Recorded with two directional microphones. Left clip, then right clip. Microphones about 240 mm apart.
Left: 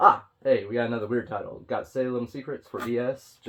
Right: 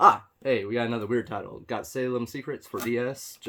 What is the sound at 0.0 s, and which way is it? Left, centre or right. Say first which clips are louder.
Speech: even; right.